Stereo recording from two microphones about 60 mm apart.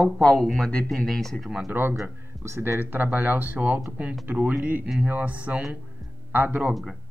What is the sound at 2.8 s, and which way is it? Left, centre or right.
Speech, right.